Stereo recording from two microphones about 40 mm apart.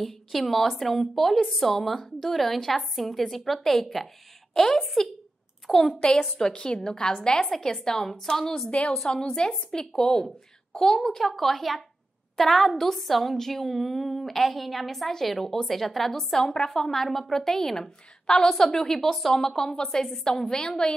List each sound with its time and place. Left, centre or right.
0.0 s a woman's voice: centre
6.3 s a woman's voice: left
7.4 s a woman's voice: centre
8.6 s a woman's voice: left
8.9 s a woman's voice: centre